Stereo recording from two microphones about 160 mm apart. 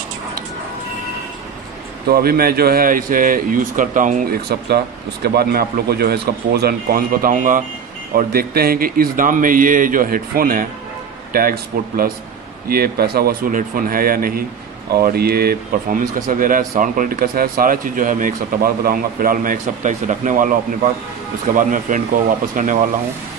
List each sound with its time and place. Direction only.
2.0 s speech: 70° right (ahead or behind)
16.2 s speech: 55° right (ahead or behind)
21.5 s speech: 55° right (ahead or behind)